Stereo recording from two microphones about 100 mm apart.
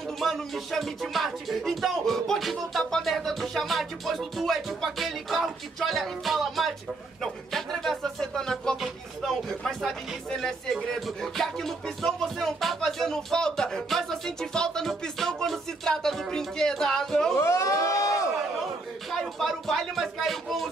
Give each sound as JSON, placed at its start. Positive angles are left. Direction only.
{"t": 0.2, "sound": "speech", "side_deg": 0}
{"t": 17.4, "sound": "a sound", "side_deg": 30}
{"t": 19.1, "sound": "speech", "side_deg": 0}